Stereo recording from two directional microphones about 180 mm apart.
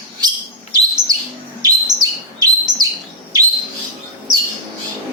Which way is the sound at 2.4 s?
20° right (ahead or behind).